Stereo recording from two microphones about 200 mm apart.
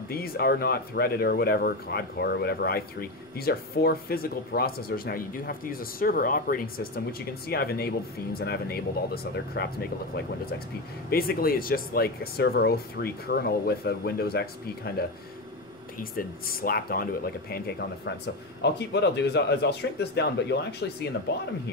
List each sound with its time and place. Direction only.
0.1 s speech: 50° left (ahead or behind)
11.1 s speech: 50° left (ahead or behind)
16.0 s speech: 45° left (ahead or behind)